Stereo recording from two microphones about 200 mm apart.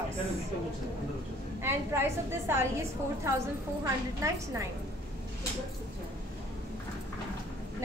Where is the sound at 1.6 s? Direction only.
10° right (ahead or behind).